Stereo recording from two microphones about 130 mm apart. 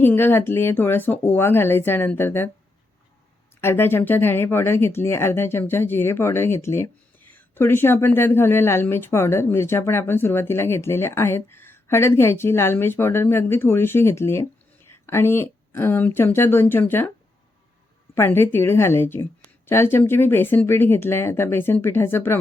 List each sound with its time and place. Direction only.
0.0 s speech: 15° left (ahead or behind)
3.6 s speech: 20° left (ahead or behind)
18.1 s speech: 15° left (ahead or behind)